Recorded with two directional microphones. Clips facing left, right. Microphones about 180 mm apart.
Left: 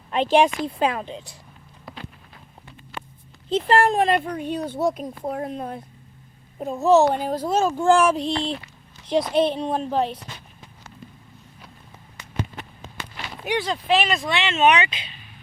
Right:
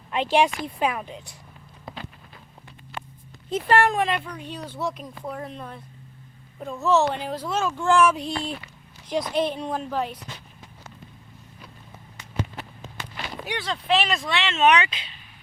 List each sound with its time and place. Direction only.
0.3 s speech: 20° left (ahead or behind)
3.5 s speech: 30° left (ahead or behind)
13.4 s speech: 20° left (ahead or behind)
13.8 s speech: 5° left (ahead or behind)